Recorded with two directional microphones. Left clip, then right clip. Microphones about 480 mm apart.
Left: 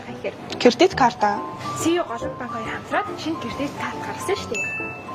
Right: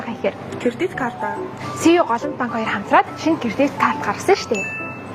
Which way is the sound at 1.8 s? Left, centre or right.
Right.